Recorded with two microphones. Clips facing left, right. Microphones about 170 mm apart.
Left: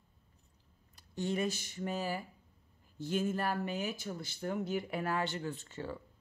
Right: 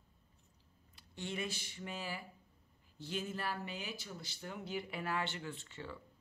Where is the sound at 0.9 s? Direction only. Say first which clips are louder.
Left 8 dB; 40° left (ahead or behind).